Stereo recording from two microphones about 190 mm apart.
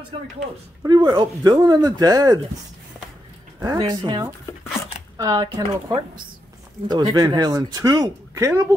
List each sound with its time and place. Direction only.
0.8 s speech: 20° right (ahead or behind)
3.5 s speech: 20° right (ahead or behind)